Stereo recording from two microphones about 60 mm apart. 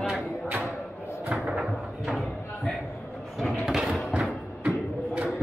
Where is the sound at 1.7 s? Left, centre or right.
Centre.